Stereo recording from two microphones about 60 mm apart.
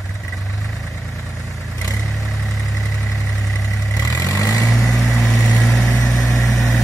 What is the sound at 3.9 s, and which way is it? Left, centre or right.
Vehicle, left.